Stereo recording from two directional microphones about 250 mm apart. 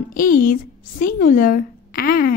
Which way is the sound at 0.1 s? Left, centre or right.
Left.